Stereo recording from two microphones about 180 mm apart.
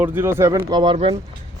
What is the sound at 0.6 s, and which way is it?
Speech, 25° right (ahead or behind).